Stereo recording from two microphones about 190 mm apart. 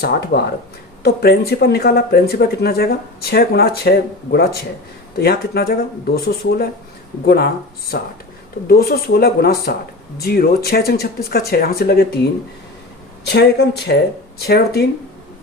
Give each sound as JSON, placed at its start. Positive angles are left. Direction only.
{"t": 0.0, "sound": "speech", "side_deg": 55}